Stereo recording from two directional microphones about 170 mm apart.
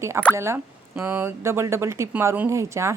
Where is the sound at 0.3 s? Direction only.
15° right (ahead or behind).